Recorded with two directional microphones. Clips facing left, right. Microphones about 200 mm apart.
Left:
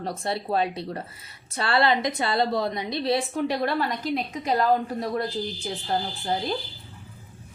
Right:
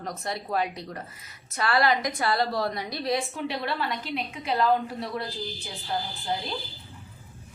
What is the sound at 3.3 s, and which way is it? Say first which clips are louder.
A woman's voice: left 5 dB; 45° left (ahead or behind).